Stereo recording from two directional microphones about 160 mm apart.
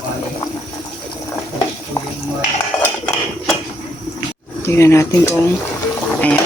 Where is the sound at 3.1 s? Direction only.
Centre (ahead or behind).